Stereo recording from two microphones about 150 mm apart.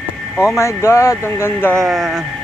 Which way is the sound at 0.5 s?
20° left (ahead or behind).